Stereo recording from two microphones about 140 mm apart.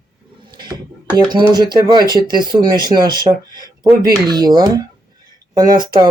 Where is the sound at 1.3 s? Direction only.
30° right (ahead or behind).